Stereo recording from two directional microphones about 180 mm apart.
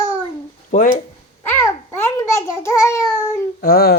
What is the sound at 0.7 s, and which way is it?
Speech, 45° left (ahead or behind).